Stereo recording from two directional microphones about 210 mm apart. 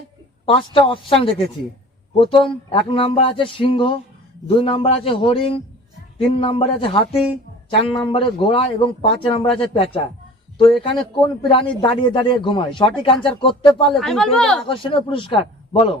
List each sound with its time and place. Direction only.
0.4 s a man's voice: 25° left (ahead or behind)
13.9 s speech: centre (ahead or behind)
14.7 s a man's voice: 25° left (ahead or behind)